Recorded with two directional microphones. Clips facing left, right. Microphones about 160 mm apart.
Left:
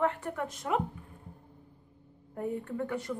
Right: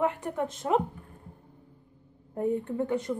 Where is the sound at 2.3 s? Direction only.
25° right (ahead or behind).